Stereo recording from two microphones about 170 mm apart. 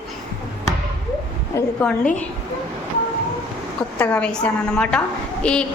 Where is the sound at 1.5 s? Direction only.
10° left (ahead or behind).